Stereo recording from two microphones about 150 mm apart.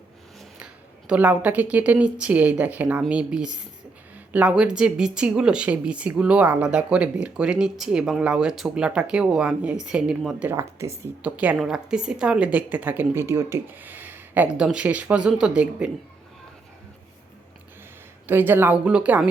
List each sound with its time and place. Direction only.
0.3 s a woman's voice: 5° right (ahead or behind)
10.5 s a woman's voice: 20° right (ahead or behind)
18.3 s a woman's voice: 15° right (ahead or behind)